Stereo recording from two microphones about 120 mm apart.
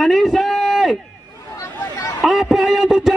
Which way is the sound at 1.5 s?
25° left (ahead or behind).